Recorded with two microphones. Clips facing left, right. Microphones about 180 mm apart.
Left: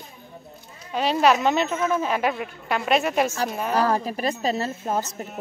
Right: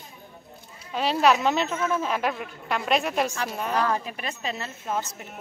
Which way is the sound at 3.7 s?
40° left (ahead or behind).